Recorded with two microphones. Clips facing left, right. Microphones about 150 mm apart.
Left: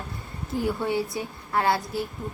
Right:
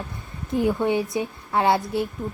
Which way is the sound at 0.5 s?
20° right (ahead or behind).